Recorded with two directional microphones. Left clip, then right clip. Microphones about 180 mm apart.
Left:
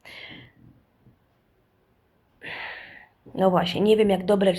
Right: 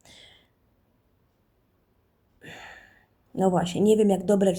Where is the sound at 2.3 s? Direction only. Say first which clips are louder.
Left 9 dB; 55° right (ahead or behind).